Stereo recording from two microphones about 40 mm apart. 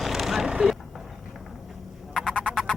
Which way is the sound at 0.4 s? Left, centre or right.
Centre.